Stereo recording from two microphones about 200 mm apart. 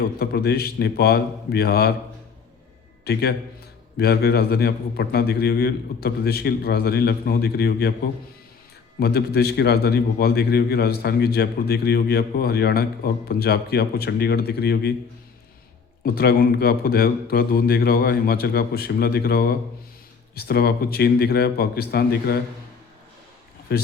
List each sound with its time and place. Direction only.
0.0 s a man's voice: 50° left (ahead or behind)
3.0 s a man's voice: 55° left (ahead or behind)
9.0 s a man's voice: 50° left (ahead or behind)
16.0 s a man's voice: 50° left (ahead or behind)
23.7 s speech: 50° left (ahead or behind)